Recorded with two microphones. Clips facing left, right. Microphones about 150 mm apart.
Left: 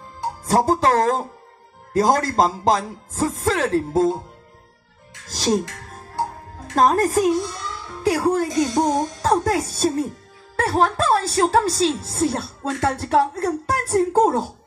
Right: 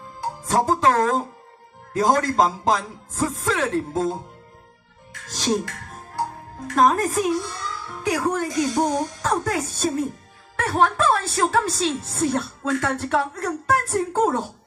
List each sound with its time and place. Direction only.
0.5 s a woman's voice: 35° left (ahead or behind)
5.3 s speech: 35° left (ahead or behind)
6.7 s a woman's voice: 35° left (ahead or behind)